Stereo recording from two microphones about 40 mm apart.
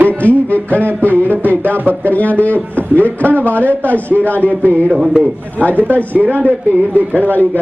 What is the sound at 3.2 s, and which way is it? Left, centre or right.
Speech, right.